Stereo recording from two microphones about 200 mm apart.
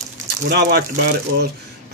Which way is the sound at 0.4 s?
55° right (ahead or behind).